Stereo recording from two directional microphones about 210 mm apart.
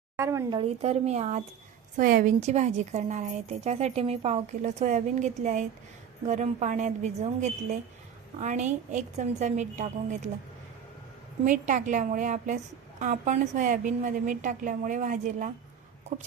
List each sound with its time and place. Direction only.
0.2 s speech: 15° right (ahead or behind)
0.6 s speech: 30° right (ahead or behind)
11.4 s speech: 35° right (ahead or behind)